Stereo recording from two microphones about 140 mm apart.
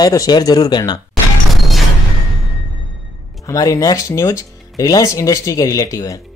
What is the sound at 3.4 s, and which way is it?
Speech, 25° left (ahead or behind).